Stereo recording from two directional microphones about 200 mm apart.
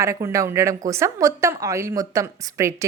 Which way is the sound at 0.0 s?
15° right (ahead or behind).